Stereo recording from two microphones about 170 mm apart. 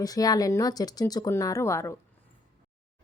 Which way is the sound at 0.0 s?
20° left (ahead or behind).